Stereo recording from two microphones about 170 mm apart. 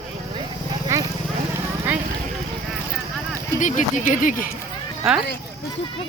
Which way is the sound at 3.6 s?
50° left (ahead or behind).